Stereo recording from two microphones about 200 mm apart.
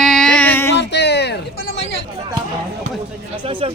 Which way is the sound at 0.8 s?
60° left (ahead or behind).